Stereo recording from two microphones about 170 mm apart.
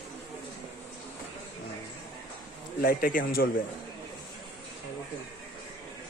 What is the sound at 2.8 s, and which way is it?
Speech, 55° left (ahead or behind).